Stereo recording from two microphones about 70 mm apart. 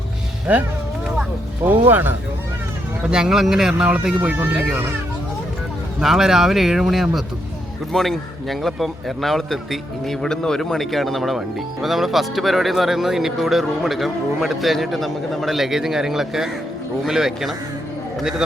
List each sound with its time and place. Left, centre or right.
0.5 s speech: right
3.0 s speech: centre
4.2 s speech: right
6.0 s speech: centre